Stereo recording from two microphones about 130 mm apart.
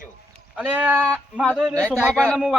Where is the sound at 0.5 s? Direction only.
10° right (ahead or behind).